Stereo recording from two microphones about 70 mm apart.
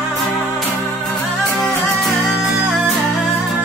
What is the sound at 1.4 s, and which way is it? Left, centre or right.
Music, centre.